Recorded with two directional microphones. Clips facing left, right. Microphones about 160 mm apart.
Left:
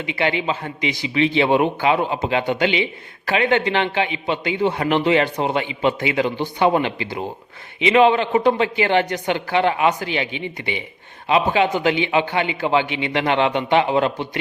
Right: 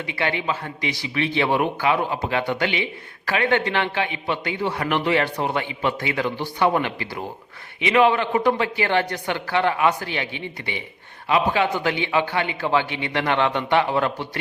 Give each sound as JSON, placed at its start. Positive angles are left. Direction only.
{"t": 0.0, "sound": "a man's voice", "side_deg": 20}